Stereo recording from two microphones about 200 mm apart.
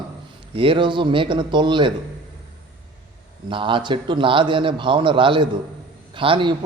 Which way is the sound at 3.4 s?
25° right (ahead or behind).